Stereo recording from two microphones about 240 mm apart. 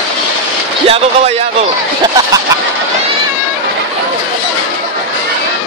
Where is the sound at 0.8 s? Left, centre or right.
Right.